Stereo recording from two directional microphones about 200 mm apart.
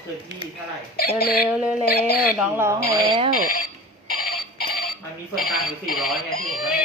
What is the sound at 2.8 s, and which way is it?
Speech, 50° left (ahead or behind).